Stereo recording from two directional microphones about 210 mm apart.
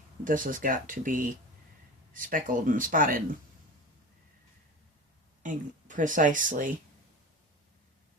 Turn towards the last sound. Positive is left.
turn(degrees=-40)  # may be behind; listen again after turning